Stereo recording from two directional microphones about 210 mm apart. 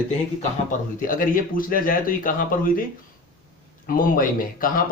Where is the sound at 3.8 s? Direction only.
40° left (ahead or behind).